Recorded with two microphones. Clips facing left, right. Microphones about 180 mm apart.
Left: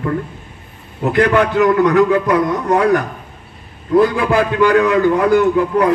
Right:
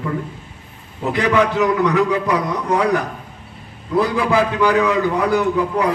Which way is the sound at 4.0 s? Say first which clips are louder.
Left 1 dB; 55° left (ahead or behind).